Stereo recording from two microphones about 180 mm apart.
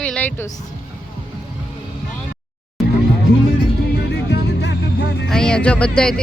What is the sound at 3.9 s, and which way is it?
Music, 70° left (ahead or behind).